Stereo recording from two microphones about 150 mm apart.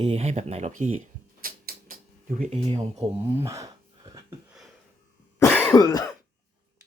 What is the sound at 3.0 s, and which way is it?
Speech, 20° right (ahead or behind).